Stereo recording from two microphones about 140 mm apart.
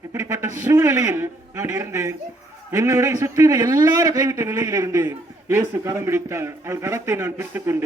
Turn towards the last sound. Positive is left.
turn(degrees=-20)  # may be behind; listen again after turning